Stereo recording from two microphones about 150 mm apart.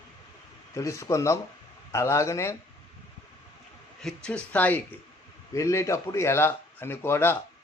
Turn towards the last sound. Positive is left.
turn(degrees=15)  # may be behind; listen again after turning